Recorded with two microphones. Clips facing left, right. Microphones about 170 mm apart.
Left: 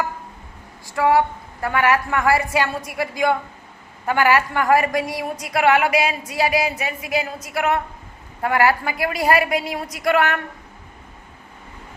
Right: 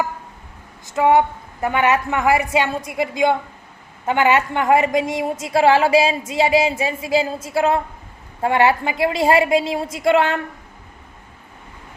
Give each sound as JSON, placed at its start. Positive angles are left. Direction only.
{"t": 0.9, "sound": "a woman's voice", "side_deg": -20}